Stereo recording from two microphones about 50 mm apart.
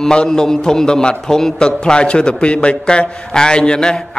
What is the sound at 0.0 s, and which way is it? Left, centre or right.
A man's voice, centre.